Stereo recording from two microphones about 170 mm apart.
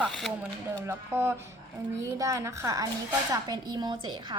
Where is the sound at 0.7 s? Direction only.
15° right (ahead or behind).